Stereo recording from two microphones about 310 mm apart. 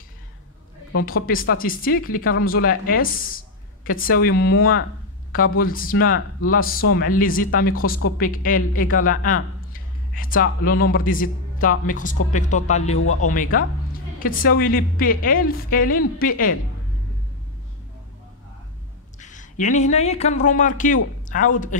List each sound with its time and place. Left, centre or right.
1.0 s a woman's voice: left
13.0 s speech: left
13.3 s a woman's voice: left
19.1 s a man's voice: left